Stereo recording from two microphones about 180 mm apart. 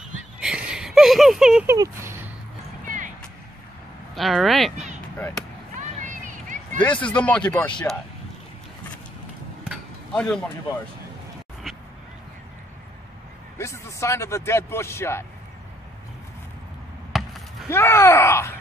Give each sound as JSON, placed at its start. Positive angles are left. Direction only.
{"t": 0.0, "sound": "a sound", "side_deg": -5}
{"t": 1.7, "sound": "a sound", "side_deg": -15}
{"t": 4.1, "sound": "speech", "side_deg": 0}
{"t": 5.8, "sound": "a sound", "side_deg": -45}
{"t": 6.8, "sound": "speech", "side_deg": 10}
{"t": 10.1, "sound": "speech", "side_deg": 5}
{"t": 13.6, "sound": "speech", "side_deg": 15}
{"t": 17.1, "sound": "chop", "side_deg": 0}
{"t": 17.6, "sound": "speech", "side_deg": 15}